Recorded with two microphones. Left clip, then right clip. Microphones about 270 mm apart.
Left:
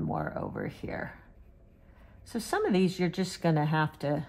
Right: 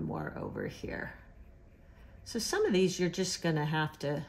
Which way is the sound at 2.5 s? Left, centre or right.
Centre.